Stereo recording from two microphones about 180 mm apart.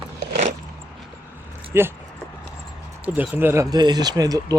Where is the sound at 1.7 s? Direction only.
15° right (ahead or behind).